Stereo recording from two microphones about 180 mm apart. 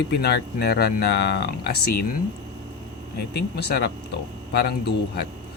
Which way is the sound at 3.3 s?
60° left (ahead or behind).